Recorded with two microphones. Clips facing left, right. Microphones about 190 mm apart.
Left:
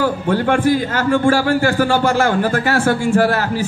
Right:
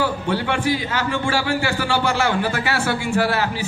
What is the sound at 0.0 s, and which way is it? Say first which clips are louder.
A man's voice: left 5 dB; 50° left (ahead or behind).